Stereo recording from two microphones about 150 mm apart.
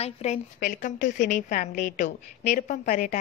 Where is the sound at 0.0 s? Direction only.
50° left (ahead or behind).